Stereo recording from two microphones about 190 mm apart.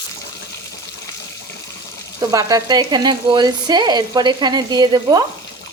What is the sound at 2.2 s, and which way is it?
Speech, 15° right (ahead or behind).